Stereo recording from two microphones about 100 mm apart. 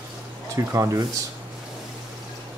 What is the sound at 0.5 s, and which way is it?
Speech, 30° right (ahead or behind).